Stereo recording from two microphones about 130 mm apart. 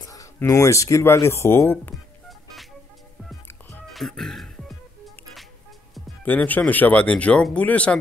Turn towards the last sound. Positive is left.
turn(degrees=10)  # may be behind; listen again after turning